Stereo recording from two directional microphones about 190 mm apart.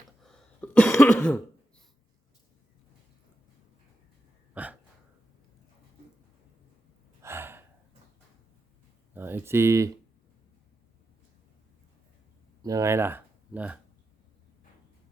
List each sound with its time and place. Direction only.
0.2 s throat clearing: 5° left (ahead or behind)
4.5 s hiccup: 10° right (ahead or behind)
7.2 s gasp: 10° right (ahead or behind)
9.1 s speech: 10° right (ahead or behind)
12.6 s speech: 15° right (ahead or behind)